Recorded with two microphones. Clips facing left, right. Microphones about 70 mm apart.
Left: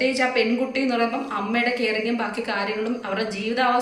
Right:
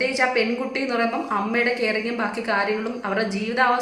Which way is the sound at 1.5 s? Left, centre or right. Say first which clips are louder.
Left 1 dB; right.